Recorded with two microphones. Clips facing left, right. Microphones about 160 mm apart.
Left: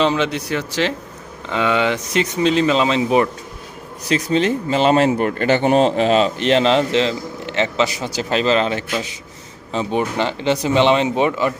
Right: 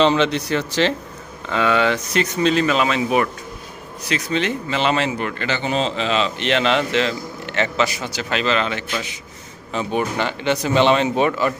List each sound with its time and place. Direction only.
0.0 s speech: 5° left (ahead or behind)
1.5 s speech: 20° left (ahead or behind)
4.1 s a man's voice: 35° left (ahead or behind); by 11.5 s 20° left (ahead or behind)